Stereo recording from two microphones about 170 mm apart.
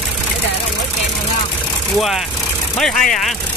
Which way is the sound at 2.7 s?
Centre (ahead or behind).